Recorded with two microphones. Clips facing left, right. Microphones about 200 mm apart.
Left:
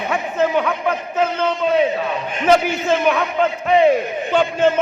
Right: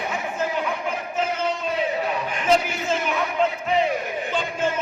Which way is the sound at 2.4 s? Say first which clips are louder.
Left 6 dB; 70° left (ahead or behind).